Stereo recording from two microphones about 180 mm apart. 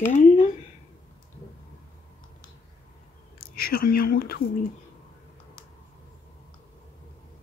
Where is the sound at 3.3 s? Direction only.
55° left (ahead or behind).